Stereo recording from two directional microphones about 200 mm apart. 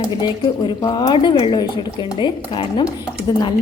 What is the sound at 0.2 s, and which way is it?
Speech, 20° left (ahead or behind).